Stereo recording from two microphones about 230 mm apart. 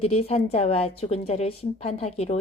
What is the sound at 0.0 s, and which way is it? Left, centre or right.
A woman's voice, left.